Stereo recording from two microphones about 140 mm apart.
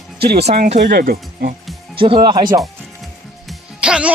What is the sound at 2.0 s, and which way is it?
Speech, 35° right (ahead or behind).